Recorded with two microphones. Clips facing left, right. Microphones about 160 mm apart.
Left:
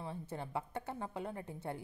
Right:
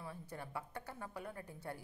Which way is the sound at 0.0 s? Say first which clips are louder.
Left 5 dB; 25° left (ahead or behind).